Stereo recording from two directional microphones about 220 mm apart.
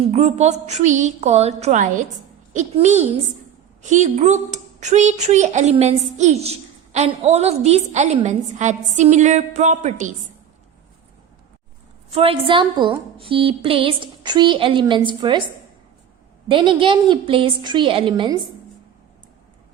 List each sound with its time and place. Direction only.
0.0 s speech: 30° right (ahead or behind)
12.1 s a woman's voice: 25° right (ahead or behind)
16.5 s a woman's voice: 20° right (ahead or behind)